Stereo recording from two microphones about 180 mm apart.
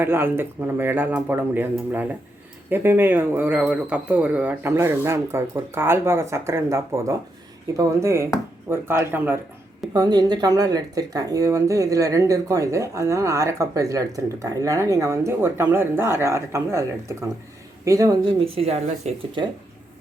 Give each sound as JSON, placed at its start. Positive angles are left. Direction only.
{"t": 0.0, "sound": "speech", "side_deg": -10}
{"t": 9.9, "sound": "speech", "side_deg": -20}